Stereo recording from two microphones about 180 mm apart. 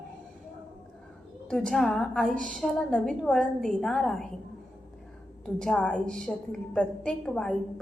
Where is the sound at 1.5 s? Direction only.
5° left (ahead or behind).